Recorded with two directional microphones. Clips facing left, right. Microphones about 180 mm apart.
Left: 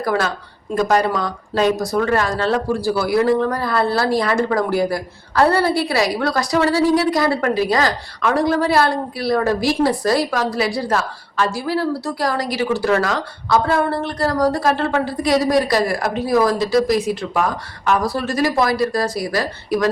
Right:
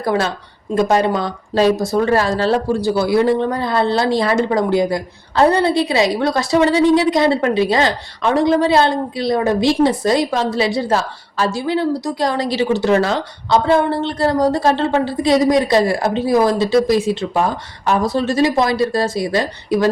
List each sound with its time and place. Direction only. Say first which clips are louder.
0.0 s speech: right 2 dB; 25° right (ahead or behind)